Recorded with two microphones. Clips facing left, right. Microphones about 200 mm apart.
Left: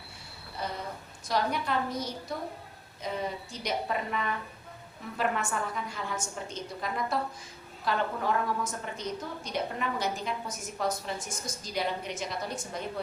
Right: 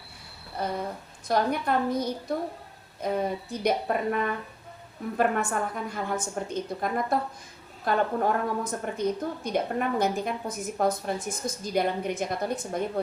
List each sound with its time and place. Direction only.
0.6 s a woman's voice: 55° right (ahead or behind)